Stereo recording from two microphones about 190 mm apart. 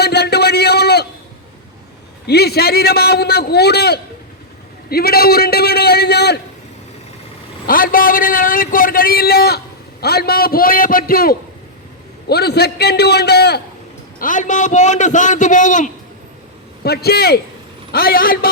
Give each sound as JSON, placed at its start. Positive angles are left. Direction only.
{"t": 0.0, "sound": "a sound", "side_deg": 60}
{"t": 2.2, "sound": "a man's voice", "side_deg": 55}
{"t": 7.7, "sound": "a man's voice", "side_deg": 50}
{"t": 14.2, "sound": "a man's voice", "side_deg": 45}
{"t": 16.8, "sound": "a man's voice", "side_deg": 55}